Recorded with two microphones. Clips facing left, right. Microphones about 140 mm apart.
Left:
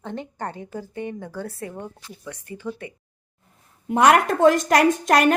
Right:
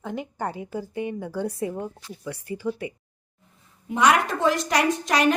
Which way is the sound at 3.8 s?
55° left (ahead or behind).